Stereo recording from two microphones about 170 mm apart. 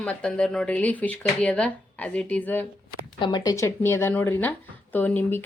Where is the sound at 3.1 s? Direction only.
25° left (ahead or behind).